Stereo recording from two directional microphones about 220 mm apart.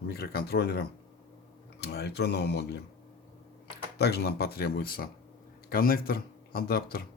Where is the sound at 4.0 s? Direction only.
50° left (ahead or behind).